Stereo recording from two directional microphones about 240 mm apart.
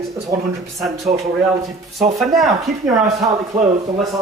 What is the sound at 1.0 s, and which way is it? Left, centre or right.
Speech, right.